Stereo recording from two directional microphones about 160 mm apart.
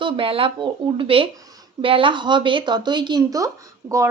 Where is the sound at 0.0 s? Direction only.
35° right (ahead or behind).